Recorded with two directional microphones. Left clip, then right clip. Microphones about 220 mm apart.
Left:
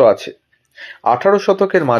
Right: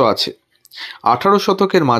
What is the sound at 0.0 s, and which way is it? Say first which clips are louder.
Speech: left 3 dB; 45° right (ahead or behind).